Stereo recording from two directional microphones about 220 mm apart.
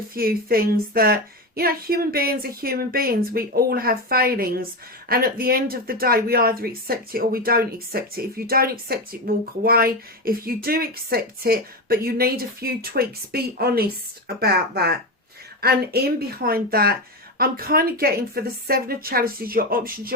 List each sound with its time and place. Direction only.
0.1 s speech: 40° right (ahead or behind)